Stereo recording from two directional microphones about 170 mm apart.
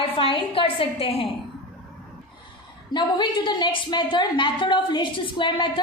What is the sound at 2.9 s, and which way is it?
A woman's voice, 25° left (ahead or behind).